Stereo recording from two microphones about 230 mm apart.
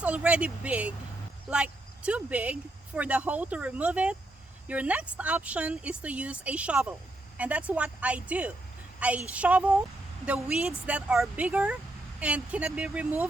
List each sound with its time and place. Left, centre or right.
0.0 s a woman's voice: centre